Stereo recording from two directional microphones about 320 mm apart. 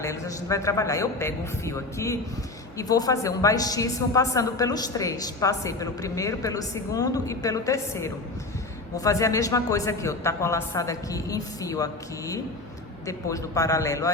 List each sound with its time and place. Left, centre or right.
0.0 s a man's voice: centre